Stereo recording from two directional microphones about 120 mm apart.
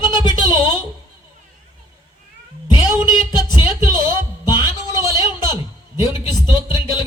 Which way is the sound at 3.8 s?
20° right (ahead or behind).